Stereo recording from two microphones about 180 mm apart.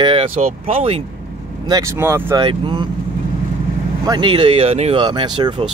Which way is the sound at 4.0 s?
25° right (ahead or behind).